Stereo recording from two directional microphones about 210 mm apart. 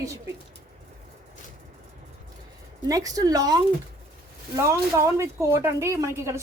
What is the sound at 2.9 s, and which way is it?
Speech, 15° right (ahead or behind).